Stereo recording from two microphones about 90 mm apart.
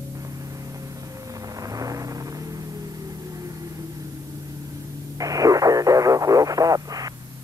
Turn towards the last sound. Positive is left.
turn(degrees=-40)  # may be behind; listen again after turning